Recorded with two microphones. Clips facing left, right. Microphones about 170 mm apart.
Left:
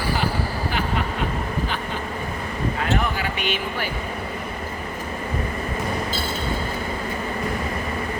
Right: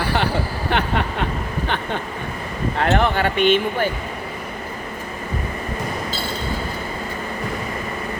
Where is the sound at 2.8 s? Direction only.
65° right (ahead or behind).